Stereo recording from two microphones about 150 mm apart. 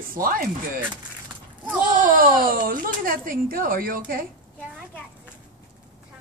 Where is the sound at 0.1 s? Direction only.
70° right (ahead or behind).